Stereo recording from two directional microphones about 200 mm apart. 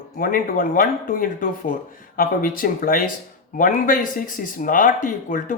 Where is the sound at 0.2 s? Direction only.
45° left (ahead or behind).